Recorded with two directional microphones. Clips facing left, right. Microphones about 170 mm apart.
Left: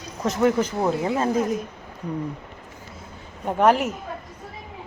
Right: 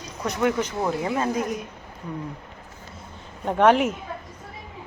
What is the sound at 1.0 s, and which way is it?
Speech, 30° left (ahead or behind).